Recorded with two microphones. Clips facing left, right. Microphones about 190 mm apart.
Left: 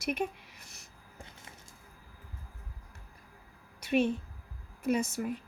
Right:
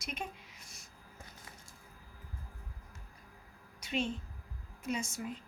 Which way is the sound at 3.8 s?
60° left (ahead or behind).